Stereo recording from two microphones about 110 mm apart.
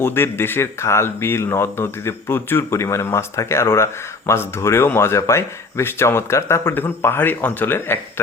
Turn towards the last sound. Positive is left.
turn(degrees=20)  # may be behind; listen again after turning